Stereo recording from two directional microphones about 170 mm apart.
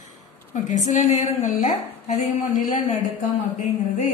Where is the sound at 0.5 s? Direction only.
45° left (ahead or behind).